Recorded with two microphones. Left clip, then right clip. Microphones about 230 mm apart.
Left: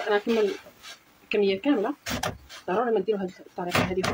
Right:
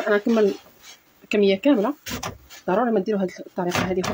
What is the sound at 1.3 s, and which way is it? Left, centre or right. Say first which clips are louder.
Speech: right 5 dB; right.